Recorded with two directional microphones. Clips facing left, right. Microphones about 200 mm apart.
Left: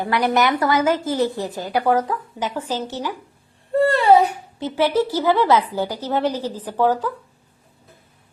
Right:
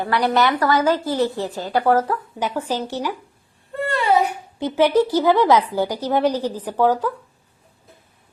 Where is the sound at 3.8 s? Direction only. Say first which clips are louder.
Left 4 dB; 35° left (ahead or behind).